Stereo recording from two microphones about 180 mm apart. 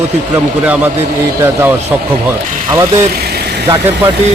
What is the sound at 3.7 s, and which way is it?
Speech, 20° right (ahead or behind).